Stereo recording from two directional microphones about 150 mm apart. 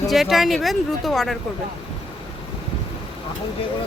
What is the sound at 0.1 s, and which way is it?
Speech, centre (ahead or behind).